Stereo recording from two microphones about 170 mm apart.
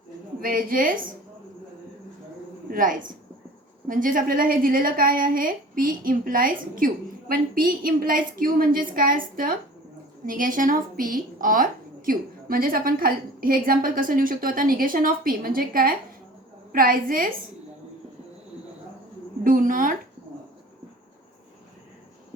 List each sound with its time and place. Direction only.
0.3 s a woman's voice: 55° right (ahead or behind)
2.6 s a woman's voice: 55° right (ahead or behind)
19.5 s a woman's voice: 55° right (ahead or behind)